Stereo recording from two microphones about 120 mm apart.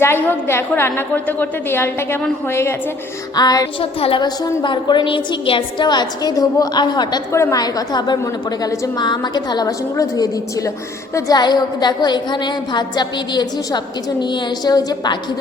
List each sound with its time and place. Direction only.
0.0 s a woman's voice: 20° left (ahead or behind)
3.3 s a woman's voice: 30° left (ahead or behind)
3.8 s a woman's voice: 45° left (ahead or behind)